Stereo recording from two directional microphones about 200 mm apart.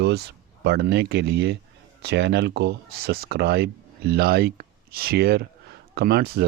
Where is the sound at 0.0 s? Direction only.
55° right (ahead or behind).